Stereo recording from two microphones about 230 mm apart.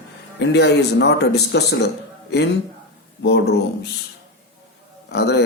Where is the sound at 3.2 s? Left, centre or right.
Left.